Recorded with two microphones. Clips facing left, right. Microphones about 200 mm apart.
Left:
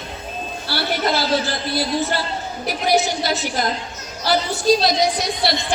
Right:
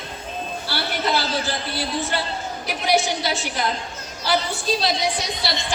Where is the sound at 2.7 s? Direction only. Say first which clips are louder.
Left 2 dB; 40° left (ahead or behind).